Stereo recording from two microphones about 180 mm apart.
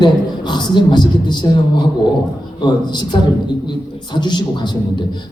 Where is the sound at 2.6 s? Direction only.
25° left (ahead or behind).